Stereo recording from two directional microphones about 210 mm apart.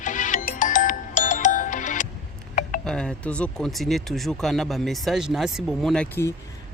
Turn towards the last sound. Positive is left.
turn(degrees=10)  # may be behind; listen again after turning